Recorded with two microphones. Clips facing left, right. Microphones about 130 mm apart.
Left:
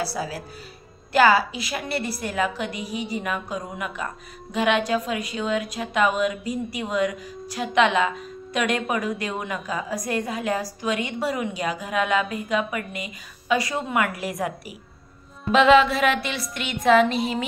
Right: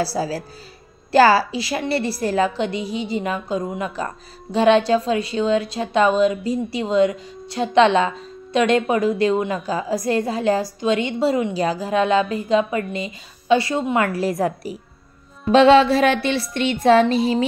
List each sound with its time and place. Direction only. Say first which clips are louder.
0.0 s music: right 6 dB; 35° right (ahead or behind)
2.2 s a woman's voice: right 7 dB; 30° right (ahead or behind)
15.5 s music: right 4 dB; 35° right (ahead or behind)